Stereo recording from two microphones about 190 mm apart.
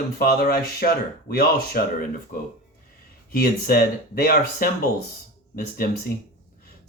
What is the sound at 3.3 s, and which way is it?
Speech, 50° left (ahead or behind).